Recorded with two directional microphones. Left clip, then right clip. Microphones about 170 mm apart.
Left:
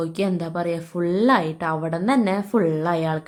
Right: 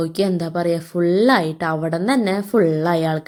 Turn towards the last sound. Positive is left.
turn(degrees=-20)  # may be behind; listen again after turning